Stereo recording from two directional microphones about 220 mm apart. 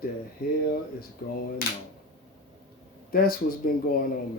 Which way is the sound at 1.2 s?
40° left (ahead or behind).